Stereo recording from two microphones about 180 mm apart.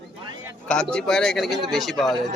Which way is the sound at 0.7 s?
5° left (ahead or behind).